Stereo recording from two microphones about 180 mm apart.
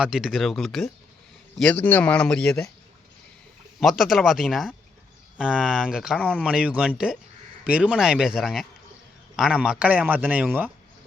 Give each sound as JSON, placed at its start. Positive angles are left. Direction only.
{"t": 0.0, "sound": "speech", "side_deg": -5}
{"t": 3.8, "sound": "speech", "side_deg": 0}
{"t": 6.1, "sound": "speech", "side_deg": 5}
{"t": 6.4, "sound": "a man's voice", "side_deg": -5}